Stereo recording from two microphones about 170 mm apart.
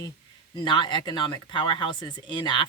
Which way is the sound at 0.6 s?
25° left (ahead or behind).